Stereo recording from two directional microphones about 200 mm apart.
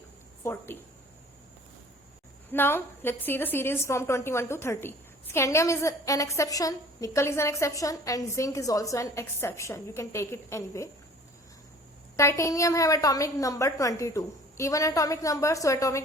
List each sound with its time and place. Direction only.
0.4 s a woman's voice: 10° left (ahead or behind)
2.5 s a woman's voice: 10° left (ahead or behind)
12.1 s a woman's voice: 15° left (ahead or behind)